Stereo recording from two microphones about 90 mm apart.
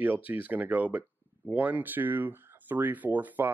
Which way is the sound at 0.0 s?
20° right (ahead or behind).